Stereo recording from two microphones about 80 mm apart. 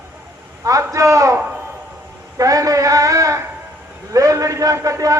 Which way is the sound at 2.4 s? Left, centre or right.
Right.